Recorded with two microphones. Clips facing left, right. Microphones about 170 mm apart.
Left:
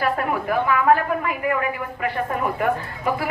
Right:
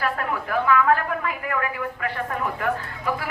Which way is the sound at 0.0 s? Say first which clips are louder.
Left 4 dB; 15° left (ahead or behind).